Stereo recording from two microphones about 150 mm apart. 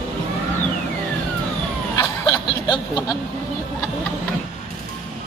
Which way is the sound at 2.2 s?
30° left (ahead or behind).